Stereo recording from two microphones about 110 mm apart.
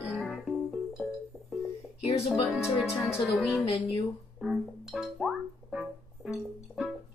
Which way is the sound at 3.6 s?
55° left (ahead or behind).